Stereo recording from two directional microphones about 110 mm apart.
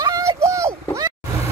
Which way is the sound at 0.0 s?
30° right (ahead or behind).